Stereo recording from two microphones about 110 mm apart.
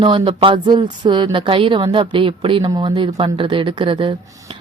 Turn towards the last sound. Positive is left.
turn(degrees=-50)  # may be behind; listen again after turning